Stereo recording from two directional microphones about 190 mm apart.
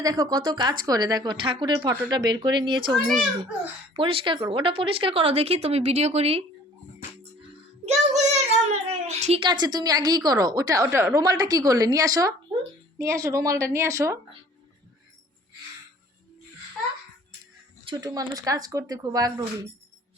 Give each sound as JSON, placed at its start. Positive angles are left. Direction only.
{"t": 0.0, "sound": "a child's voice", "side_deg": -20}
{"t": 7.9, "sound": "a child's voice", "side_deg": -35}
{"t": 17.8, "sound": "a child's voice", "side_deg": -20}